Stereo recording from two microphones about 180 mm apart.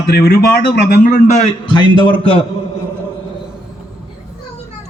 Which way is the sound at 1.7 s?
25° left (ahead or behind).